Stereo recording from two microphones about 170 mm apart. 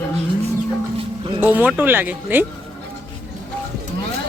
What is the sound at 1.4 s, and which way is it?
Speech, 10° right (ahead or behind).